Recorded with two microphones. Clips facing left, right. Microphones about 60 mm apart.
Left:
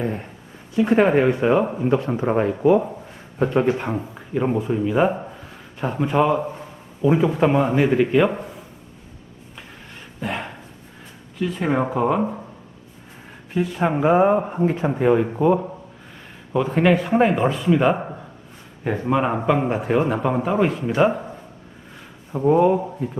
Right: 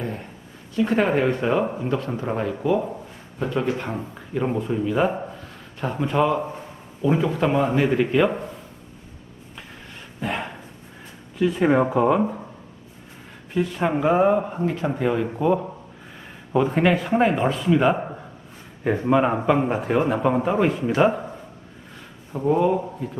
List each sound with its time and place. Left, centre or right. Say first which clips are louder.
0.0 s a sound: left 5 dB; left
0.7 s a man's voice: left 4 dB; centre
3.8 s speech: left 3 dB; centre
10.2 s a sound: even; centre
11.3 s a man's voice: right 3 dB; centre
13.5 s speech: left 1 dB; centre
14.0 s a man's voice: left 2 dB; centre
16.1 s a man's voice: right 1 dB; centre
21.9 s a man's voice: left 3 dB; centre